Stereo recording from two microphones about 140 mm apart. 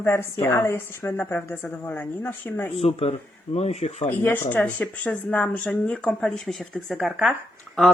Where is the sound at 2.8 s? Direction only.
45° left (ahead or behind).